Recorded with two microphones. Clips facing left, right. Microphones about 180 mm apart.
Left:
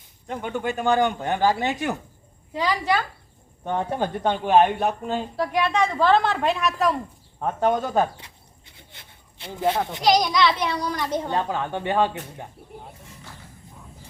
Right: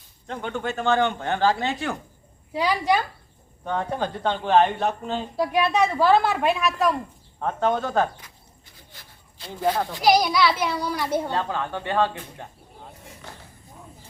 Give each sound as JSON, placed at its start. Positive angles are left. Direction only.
{"t": 0.3, "sound": "speech", "side_deg": 10}
{"t": 2.5, "sound": "a child's voice", "side_deg": -10}
{"t": 3.6, "sound": "speech", "side_deg": 20}
{"t": 5.4, "sound": "a woman's voice", "side_deg": -10}
{"t": 8.7, "sound": "a sound", "side_deg": 25}
{"t": 10.0, "sound": "a child's voice", "side_deg": -5}
{"t": 11.3, "sound": "speech", "side_deg": 15}